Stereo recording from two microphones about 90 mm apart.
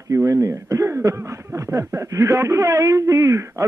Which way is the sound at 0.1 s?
35° right (ahead or behind).